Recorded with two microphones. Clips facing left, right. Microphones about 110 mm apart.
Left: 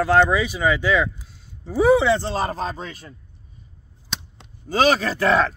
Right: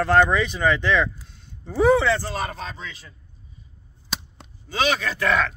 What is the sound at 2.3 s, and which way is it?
Speech, 35° left (ahead or behind).